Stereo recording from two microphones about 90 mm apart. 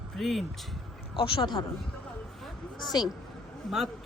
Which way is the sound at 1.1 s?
70° left (ahead or behind).